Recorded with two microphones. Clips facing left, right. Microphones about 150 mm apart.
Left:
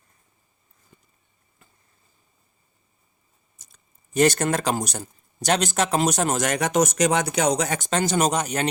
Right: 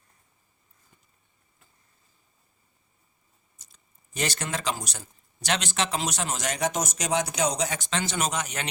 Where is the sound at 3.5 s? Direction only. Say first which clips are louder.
Left 2 dB; 45° left (ahead or behind).